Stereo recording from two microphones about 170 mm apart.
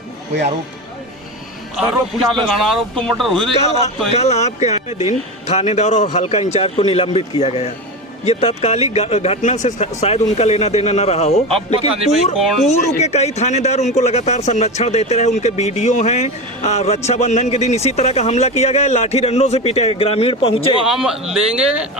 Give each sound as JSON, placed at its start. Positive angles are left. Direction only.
{"t": 1.7, "sound": "a man's voice", "side_deg": 0}
{"t": 3.6, "sound": "speech", "side_deg": 40}
{"t": 12.0, "sound": "a man's voice", "side_deg": 0}
{"t": 12.6, "sound": "speech", "side_deg": 40}
{"t": 20.8, "sound": "a man's voice", "side_deg": -5}